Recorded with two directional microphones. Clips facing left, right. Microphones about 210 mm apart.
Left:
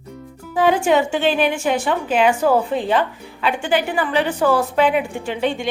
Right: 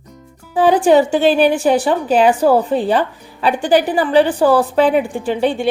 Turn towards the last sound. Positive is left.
turn(degrees=-35)  # may be behind; listen again after turning